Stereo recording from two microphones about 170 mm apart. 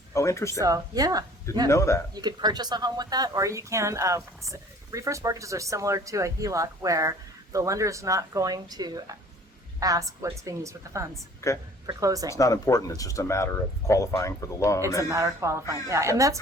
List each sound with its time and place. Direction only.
0.1 s speech: 15° left (ahead or behind)
0.6 s speech: 20° right (ahead or behind)
1.7 s speech: 15° left (ahead or behind)
2.1 s a woman's voice: 25° right (ahead or behind)
11.4 s speech: 15° left (ahead or behind)
11.9 s speech: 20° right (ahead or behind)
12.3 s speech: 20° left (ahead or behind)
15.1 s a woman's voice: 15° right (ahead or behind)